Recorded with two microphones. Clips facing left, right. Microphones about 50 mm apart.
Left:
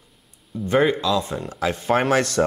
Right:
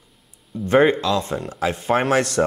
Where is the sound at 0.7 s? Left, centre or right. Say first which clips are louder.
Right 3 dB; right.